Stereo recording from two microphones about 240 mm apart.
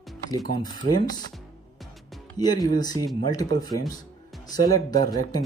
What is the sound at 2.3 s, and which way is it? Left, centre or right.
Speech, centre.